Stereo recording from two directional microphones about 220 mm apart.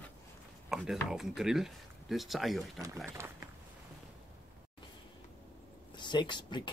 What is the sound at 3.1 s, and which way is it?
Speech, 10° right (ahead or behind).